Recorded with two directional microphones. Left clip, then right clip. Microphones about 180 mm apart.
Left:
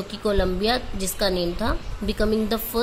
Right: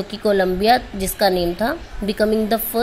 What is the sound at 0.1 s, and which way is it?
A woman's voice, 15° right (ahead or behind).